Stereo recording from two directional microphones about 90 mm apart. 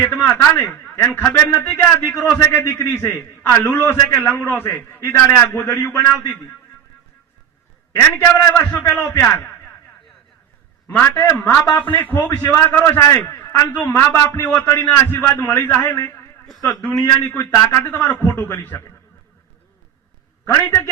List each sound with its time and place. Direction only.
0.0 s a man's voice: 20° left (ahead or behind)
7.9 s a man's voice: 25° left (ahead or behind)
10.9 s a man's voice: 25° left (ahead or behind)
12.4 s a man's voice: 35° left (ahead or behind)
12.6 s a man's voice: 25° left (ahead or behind)
16.0 s a man's voice: 35° left (ahead or behind)
17.6 s a man's voice: 20° left (ahead or behind)
20.7 s a man's voice: 25° left (ahead or behind)